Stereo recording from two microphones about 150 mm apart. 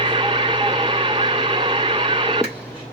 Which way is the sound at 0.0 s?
35° right (ahead or behind).